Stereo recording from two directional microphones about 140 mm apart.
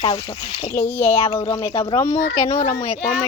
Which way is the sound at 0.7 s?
15° left (ahead or behind).